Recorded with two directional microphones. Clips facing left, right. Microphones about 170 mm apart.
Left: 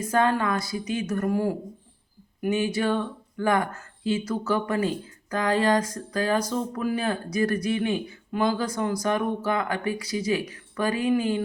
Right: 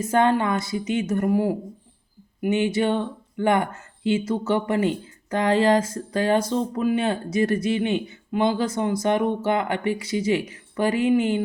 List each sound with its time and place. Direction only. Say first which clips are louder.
0.0 s speech: right 3 dB; 25° right (ahead or behind)